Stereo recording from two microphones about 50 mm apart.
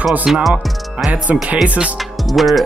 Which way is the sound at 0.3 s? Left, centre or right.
Centre.